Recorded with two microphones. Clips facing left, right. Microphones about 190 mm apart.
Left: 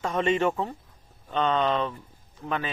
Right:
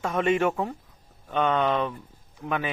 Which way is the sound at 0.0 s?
10° right (ahead or behind).